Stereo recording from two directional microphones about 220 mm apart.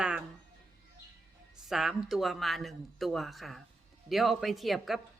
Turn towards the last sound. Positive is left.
turn(degrees=0)  # may be behind; listen again after turning